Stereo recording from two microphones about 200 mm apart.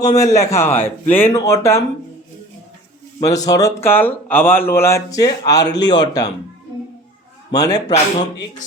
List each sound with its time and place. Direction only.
0.0 s a man's voice: 15° left (ahead or behind)
3.2 s a man's voice: 20° left (ahead or behind)
7.5 s a man's voice: 20° left (ahead or behind)